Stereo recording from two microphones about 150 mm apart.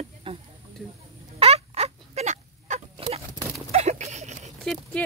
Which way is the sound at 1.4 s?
40° right (ahead or behind).